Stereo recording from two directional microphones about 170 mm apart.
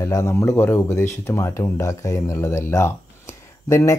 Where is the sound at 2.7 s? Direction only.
15° left (ahead or behind).